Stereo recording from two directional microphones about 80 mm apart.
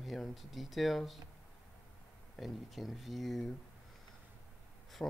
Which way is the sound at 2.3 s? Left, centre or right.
Centre.